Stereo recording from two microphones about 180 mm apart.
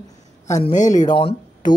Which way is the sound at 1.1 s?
30° left (ahead or behind).